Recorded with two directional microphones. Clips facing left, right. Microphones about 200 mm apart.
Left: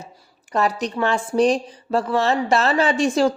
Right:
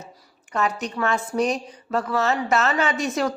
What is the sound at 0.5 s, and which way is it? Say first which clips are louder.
Speech: left 4 dB; 35° left (ahead or behind).